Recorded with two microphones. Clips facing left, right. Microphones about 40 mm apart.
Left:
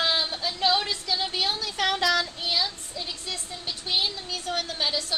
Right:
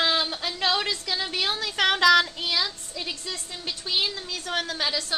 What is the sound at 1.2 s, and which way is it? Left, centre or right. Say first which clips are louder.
Child singing: even; right.